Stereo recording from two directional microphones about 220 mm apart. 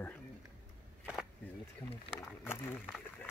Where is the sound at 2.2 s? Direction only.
10° left (ahead or behind).